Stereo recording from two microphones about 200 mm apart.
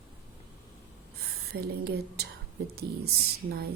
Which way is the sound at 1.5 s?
50° right (ahead or behind).